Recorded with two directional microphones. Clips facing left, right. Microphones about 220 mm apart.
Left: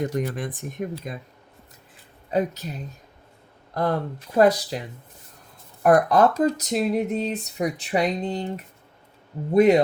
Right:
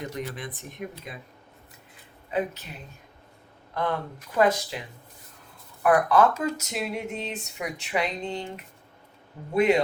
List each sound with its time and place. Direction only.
0.1 s speech: 50° left (ahead or behind)
2.3 s speech: 40° left (ahead or behind)
3.8 s speech: 40° left (ahead or behind)
5.8 s speech: 40° left (ahead or behind)